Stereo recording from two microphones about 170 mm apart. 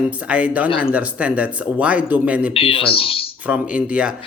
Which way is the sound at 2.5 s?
30° left (ahead or behind).